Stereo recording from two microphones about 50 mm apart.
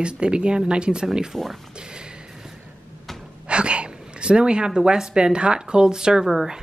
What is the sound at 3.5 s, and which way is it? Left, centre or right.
Speech, right.